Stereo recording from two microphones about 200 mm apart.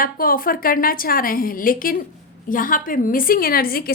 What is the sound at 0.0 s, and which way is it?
A woman's voice, 45° left (ahead or behind).